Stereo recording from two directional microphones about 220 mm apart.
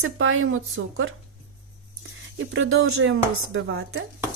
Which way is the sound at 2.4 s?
60° right (ahead or behind).